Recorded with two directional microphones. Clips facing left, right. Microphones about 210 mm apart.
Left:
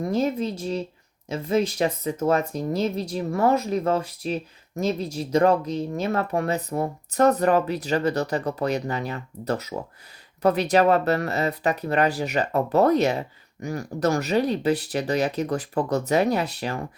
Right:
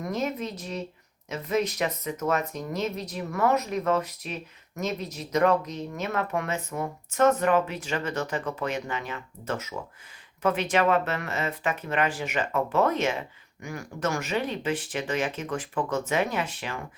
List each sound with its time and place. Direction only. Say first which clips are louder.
0.0 s speech: left 6 dB; 30° left (ahead or behind)